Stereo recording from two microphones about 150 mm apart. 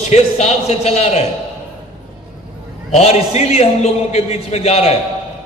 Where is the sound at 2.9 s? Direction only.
45° left (ahead or behind).